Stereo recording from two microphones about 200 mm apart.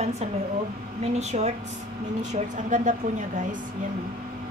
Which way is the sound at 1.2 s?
35° right (ahead or behind).